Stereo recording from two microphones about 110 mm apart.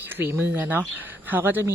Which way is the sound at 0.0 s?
20° right (ahead or behind).